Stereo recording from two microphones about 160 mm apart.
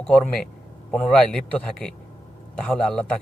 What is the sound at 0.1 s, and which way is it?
A man's voice, 5° left (ahead or behind).